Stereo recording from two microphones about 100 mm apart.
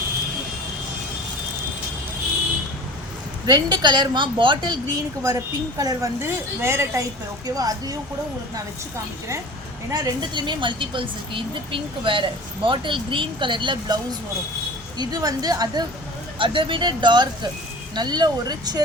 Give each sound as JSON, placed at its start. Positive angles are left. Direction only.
{"t": 3.4, "sound": "speech", "side_deg": -40}
{"t": 4.9, "sound": "a woman's voice", "side_deg": -35}
{"t": 7.4, "sound": "a woman's voice", "side_deg": -40}
{"t": 9.9, "sound": "a woman's voice", "side_deg": -45}
{"t": 16.4, "sound": "speech", "side_deg": -55}